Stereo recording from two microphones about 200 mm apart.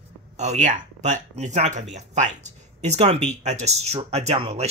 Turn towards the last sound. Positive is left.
turn(degrees=-30)  # may be behind; listen again after turning